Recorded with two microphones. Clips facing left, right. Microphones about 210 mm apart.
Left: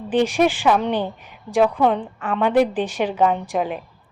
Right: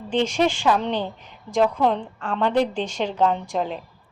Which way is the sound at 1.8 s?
5° left (ahead or behind).